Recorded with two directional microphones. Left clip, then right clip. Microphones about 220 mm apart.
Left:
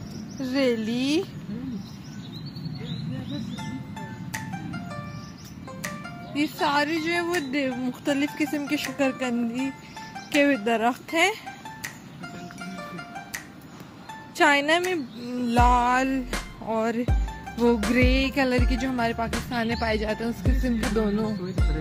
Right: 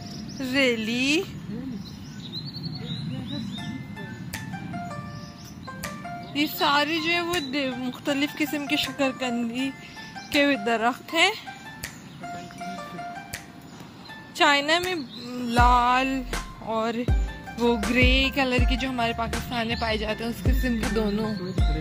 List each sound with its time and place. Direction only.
0.4 s a woman's voice: 10° left (ahead or behind)
6.3 s a woman's voice: 5° left (ahead or behind)
14.4 s a woman's voice: 20° left (ahead or behind)